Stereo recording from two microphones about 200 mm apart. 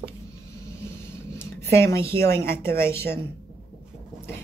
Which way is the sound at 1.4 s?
10° left (ahead or behind).